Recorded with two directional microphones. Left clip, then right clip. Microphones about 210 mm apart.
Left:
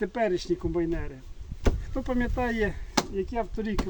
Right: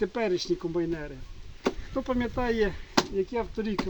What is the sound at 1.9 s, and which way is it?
Speech, 25° left (ahead or behind).